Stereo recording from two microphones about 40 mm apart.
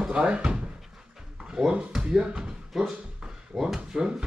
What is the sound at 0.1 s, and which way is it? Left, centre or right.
Speech, right.